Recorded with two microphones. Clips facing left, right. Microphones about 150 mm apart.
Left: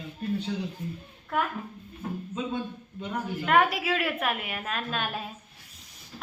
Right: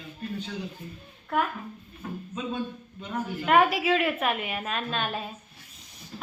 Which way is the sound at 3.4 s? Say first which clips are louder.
Right 2 dB; 5° right (ahead or behind).